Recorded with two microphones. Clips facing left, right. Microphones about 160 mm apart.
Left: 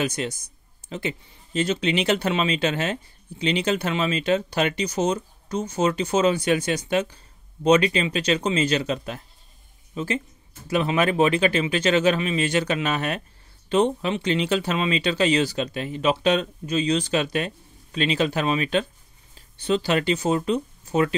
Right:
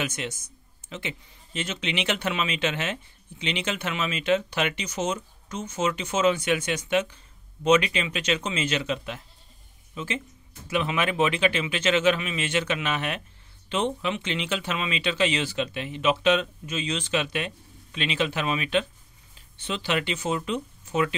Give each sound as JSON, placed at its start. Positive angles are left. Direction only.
{"t": 0.0, "sound": "a man's voice", "side_deg": 35}